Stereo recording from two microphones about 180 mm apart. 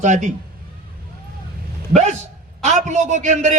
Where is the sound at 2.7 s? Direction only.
40° right (ahead or behind).